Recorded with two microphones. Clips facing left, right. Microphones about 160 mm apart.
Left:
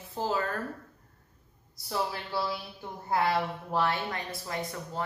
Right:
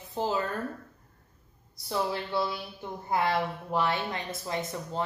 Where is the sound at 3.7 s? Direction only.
20° right (ahead or behind).